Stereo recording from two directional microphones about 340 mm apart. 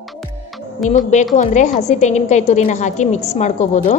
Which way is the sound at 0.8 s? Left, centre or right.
Left.